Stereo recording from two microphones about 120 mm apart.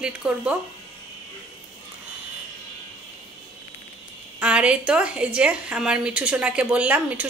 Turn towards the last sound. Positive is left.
turn(degrees=-15)  # may be behind; listen again after turning